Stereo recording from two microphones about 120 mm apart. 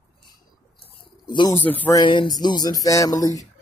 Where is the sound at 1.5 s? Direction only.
15° left (ahead or behind).